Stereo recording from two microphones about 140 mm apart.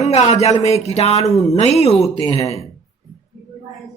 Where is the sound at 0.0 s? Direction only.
50° left (ahead or behind).